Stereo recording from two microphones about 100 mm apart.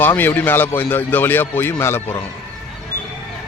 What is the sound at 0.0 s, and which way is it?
Speech, 20° left (ahead or behind).